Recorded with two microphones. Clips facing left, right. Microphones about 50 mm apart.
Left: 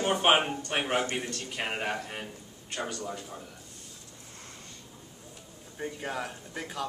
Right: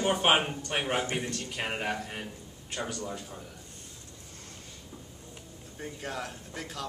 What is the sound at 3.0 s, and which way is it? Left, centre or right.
Speech, centre.